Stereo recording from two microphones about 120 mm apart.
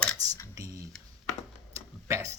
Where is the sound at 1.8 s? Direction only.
25° right (ahead or behind).